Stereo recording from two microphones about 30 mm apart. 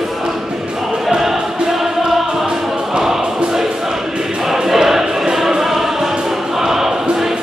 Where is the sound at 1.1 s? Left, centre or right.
Centre.